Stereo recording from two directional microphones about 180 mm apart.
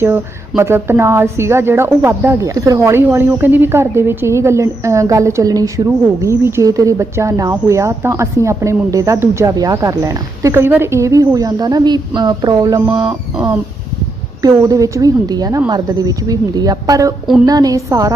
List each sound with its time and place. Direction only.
0.0 s a woman's voice: 15° right (ahead or behind)
13.1 s music: 5° right (ahead or behind)
14.4 s a woman's voice: 20° right (ahead or behind)